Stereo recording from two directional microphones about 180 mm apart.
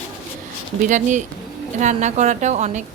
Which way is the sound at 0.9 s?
45° right (ahead or behind).